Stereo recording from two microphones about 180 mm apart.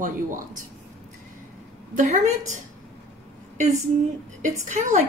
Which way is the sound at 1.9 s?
45° right (ahead or behind).